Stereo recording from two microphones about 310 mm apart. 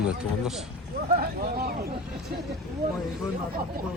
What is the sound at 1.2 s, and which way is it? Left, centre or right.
Speech, right.